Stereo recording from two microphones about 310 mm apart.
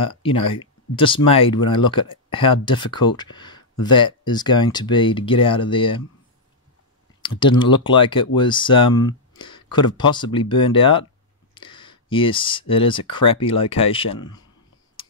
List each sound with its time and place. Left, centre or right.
0.0 s speech: centre
7.2 s speech: centre